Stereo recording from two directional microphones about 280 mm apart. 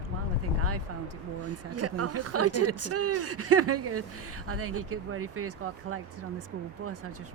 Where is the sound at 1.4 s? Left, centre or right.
Right.